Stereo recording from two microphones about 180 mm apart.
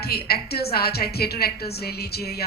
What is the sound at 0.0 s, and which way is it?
A woman's voice, 60° left (ahead or behind).